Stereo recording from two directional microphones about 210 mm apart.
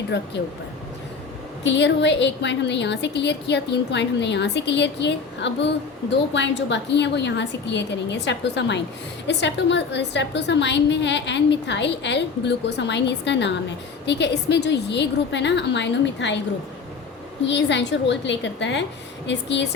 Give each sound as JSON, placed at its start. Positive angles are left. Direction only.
{"t": 1.6, "sound": "a woman's voice", "side_deg": 55}
{"t": 17.4, "sound": "a woman's voice", "side_deg": 55}